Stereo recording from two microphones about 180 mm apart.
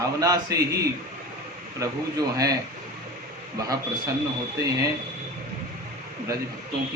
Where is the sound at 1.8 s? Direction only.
20° right (ahead or behind).